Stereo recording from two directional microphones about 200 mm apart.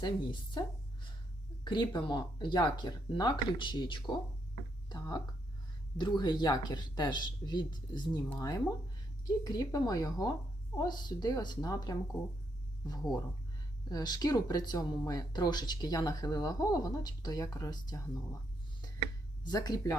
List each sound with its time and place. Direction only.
0.0 s speech: 25° left (ahead or behind)
1.6 s speech: 25° left (ahead or behind)
19.5 s speech: 20° left (ahead or behind)